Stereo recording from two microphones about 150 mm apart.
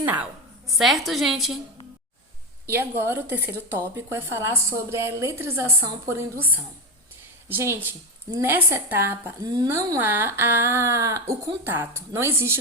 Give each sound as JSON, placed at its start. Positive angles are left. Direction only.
{"t": 0.0, "sound": "a woman's voice", "side_deg": -15}
{"t": 0.8, "sound": "a woman's voice", "side_deg": 0}
{"t": 2.7, "sound": "a woman's voice", "side_deg": -15}